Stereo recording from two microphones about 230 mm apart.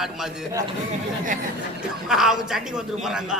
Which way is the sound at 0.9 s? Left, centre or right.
Right.